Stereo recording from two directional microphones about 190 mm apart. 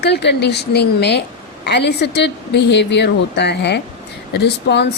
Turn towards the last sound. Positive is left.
turn(degrees=60)  # may be behind; listen again after turning